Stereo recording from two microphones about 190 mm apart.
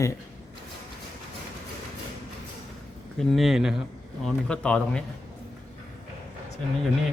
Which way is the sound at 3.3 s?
Centre (ahead or behind).